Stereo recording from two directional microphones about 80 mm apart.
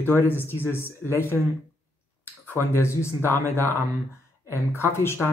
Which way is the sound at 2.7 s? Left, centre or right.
Left.